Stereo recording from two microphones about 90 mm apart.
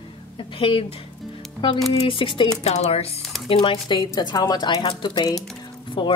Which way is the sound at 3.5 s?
55° left (ahead or behind).